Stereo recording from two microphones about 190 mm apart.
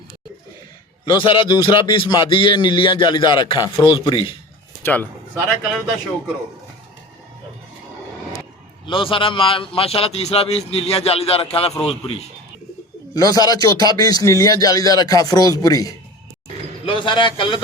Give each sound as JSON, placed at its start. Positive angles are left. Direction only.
{"t": 1.2, "sound": "speech", "side_deg": 30}
{"t": 4.8, "sound": "speech", "side_deg": 10}
{"t": 8.9, "sound": "a man's voice", "side_deg": 25}
{"t": 13.1, "sound": "speech", "side_deg": 20}